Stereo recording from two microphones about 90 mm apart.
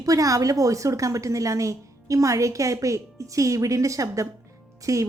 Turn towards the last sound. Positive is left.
turn(degrees=-35)  # may be behind; listen again after turning